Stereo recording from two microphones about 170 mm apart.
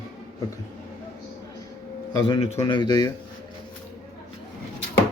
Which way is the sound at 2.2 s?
30° left (ahead or behind).